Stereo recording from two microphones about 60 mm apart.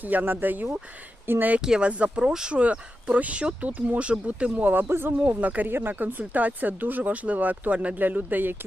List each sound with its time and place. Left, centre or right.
0.0 s speech: right
1.6 s speech: centre; by 8.5 s right